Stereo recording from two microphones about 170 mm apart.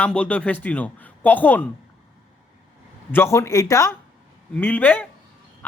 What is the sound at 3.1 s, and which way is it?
A man's voice, 15° left (ahead or behind).